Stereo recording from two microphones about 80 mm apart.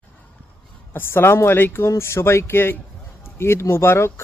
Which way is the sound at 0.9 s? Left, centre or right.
Left.